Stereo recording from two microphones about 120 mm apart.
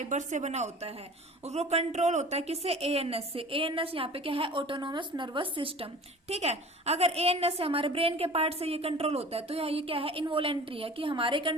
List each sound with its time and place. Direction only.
0.0 s a woman's voice: 90° right; by 11.5 s 45° right (ahead or behind)